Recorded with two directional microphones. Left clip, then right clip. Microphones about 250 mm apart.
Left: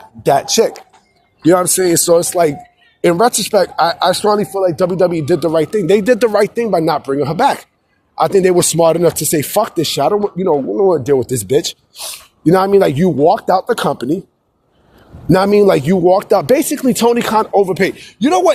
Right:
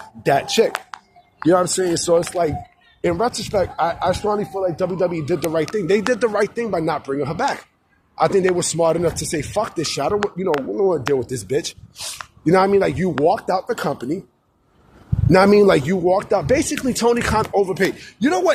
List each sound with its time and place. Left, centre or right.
0.2 s speech: centre
1.4 s speech: left
15.3 s speech: left